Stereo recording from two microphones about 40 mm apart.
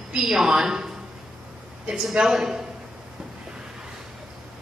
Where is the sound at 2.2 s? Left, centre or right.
Centre.